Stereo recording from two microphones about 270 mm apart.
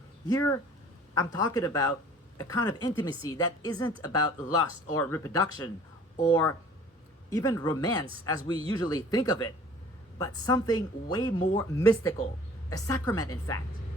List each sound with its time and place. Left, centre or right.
0.3 s speech: centre